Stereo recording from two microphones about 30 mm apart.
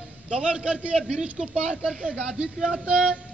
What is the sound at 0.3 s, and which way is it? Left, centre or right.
Speech, right.